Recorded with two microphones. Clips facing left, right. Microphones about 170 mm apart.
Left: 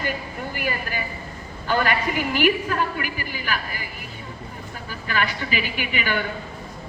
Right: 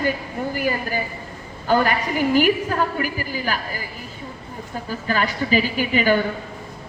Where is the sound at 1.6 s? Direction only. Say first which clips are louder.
Right 3 dB; 40° right (ahead or behind).